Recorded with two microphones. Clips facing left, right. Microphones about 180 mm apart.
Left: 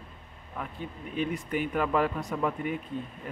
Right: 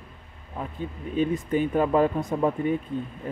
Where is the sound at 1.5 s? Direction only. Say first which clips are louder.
Right 5 dB; 25° right (ahead or behind).